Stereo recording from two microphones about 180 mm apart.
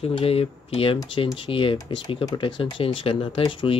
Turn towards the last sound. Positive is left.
turn(degrees=30)  # may be behind; listen again after turning